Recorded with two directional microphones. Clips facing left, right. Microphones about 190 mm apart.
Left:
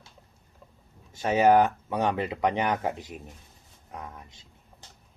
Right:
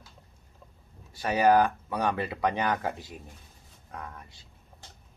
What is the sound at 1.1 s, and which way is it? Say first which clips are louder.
Speech: left 2 dB; 20° left (ahead or behind).